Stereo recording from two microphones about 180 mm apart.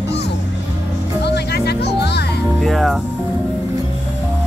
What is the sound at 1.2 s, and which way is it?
Music, 65° left (ahead or behind).